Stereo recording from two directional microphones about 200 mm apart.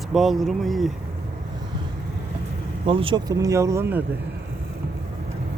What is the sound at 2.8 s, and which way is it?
Speech, 25° right (ahead or behind).